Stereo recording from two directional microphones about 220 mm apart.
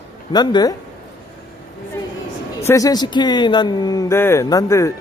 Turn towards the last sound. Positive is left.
turn(degrees=15)  # may be behind; listen again after turning